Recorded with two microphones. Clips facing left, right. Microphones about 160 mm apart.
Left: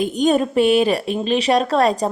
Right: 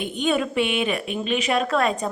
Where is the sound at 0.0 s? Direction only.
40° left (ahead or behind).